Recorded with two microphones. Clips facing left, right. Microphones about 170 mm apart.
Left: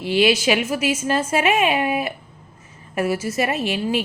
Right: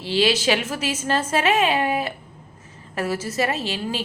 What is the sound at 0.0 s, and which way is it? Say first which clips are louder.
A woman's voice: left 3 dB; 15° left (ahead or behind).